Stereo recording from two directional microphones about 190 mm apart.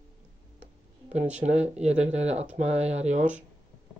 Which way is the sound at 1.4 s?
35° right (ahead or behind).